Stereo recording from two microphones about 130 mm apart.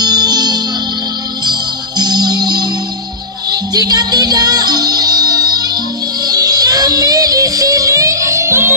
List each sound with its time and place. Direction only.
0.0 s music: 30° right (ahead or behind)
3.7 s music: 30° right (ahead or behind)